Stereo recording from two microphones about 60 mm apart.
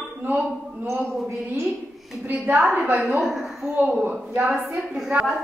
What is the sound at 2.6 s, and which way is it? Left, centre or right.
Speech, centre.